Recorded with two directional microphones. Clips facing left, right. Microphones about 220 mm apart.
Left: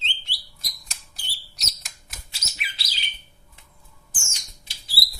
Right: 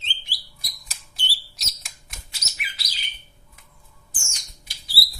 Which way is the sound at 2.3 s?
25° left (ahead or behind).